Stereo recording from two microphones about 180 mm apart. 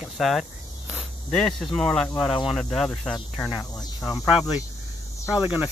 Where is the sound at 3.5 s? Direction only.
20° left (ahead or behind).